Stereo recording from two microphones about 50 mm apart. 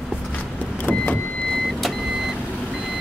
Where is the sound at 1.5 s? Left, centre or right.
Centre.